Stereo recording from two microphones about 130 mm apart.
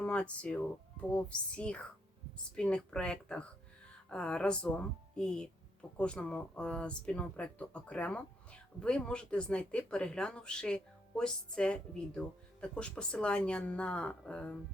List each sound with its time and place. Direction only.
0.0 s speech: 10° left (ahead or behind)